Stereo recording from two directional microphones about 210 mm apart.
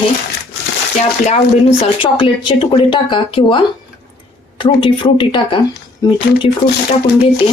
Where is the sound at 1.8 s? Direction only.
25° left (ahead or behind).